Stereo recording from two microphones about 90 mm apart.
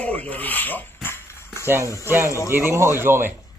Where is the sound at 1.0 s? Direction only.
25° left (ahead or behind).